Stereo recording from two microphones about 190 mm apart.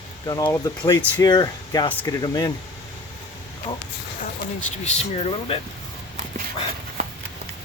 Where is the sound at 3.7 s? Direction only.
25° left (ahead or behind).